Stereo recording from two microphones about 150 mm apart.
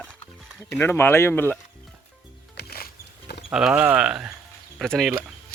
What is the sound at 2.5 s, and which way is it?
Music, 90° left.